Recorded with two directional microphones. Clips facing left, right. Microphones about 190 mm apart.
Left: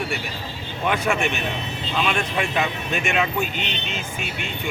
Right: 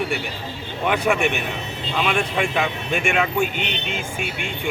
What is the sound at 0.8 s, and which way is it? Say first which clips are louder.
Speech: right 2 dB; 10° right (ahead or behind).